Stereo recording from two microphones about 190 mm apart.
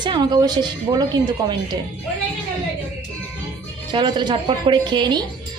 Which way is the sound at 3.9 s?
25° right (ahead or behind).